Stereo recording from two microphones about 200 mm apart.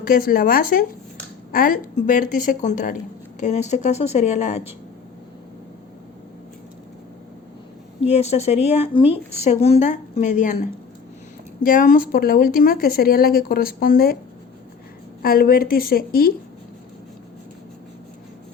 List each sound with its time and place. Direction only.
0.1 s speech: 45° left (ahead or behind)
8.0 s speech: 30° left (ahead or behind); by 14.2 s 50° left (ahead or behind)
15.2 s speech: 50° left (ahead or behind)